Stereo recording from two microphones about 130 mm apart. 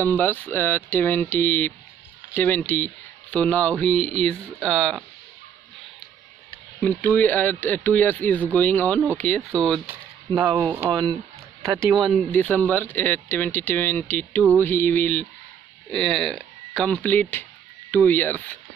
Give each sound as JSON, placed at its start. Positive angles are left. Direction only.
{"t": 0.0, "sound": "speech", "side_deg": 15}
{"t": 6.8, "sound": "speech", "side_deg": 15}
{"t": 10.3, "sound": "speech", "side_deg": -30}
{"t": 12.0, "sound": "speech", "side_deg": 0}
{"t": 12.3, "sound": "speech", "side_deg": 15}